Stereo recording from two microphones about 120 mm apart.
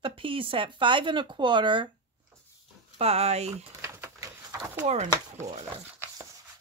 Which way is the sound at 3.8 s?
25° right (ahead or behind).